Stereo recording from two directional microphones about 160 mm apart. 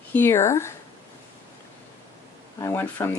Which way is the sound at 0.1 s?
15° left (ahead or behind).